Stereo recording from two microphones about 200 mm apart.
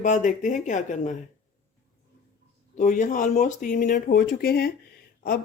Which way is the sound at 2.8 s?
40° left (ahead or behind).